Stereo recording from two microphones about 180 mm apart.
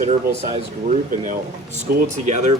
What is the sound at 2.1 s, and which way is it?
Speech, 40° right (ahead or behind).